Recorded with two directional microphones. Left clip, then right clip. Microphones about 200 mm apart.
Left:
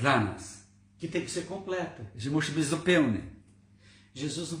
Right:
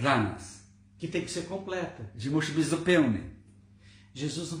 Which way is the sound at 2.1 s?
15° left (ahead or behind).